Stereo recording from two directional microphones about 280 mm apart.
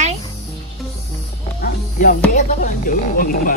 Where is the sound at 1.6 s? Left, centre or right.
Left.